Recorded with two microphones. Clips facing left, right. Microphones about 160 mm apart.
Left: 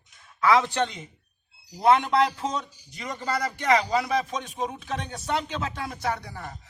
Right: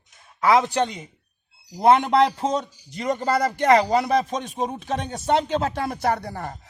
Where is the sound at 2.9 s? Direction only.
45° right (ahead or behind).